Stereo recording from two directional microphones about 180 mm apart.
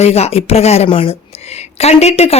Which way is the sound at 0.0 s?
35° left (ahead or behind).